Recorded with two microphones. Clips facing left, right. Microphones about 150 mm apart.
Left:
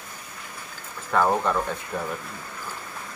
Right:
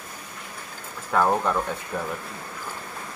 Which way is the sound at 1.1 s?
5° right (ahead or behind).